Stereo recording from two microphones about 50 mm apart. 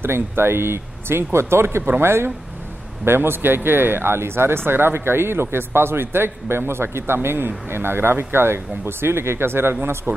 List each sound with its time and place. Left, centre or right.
0.0 s speech: right
3.1 s a man's voice: right